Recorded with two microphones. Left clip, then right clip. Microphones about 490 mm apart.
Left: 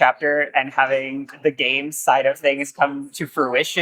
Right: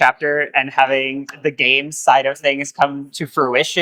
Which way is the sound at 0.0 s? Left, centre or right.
Right.